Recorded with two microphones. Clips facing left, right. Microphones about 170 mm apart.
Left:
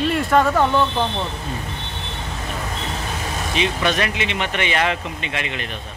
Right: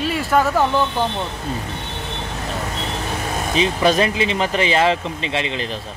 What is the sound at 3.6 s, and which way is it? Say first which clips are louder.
Speech: right 4 dB; 30° right (ahead or behind).